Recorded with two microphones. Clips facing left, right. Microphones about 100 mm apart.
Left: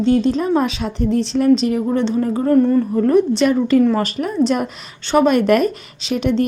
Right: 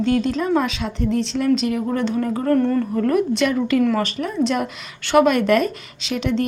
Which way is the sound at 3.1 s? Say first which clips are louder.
Left 5 dB; 30° left (ahead or behind).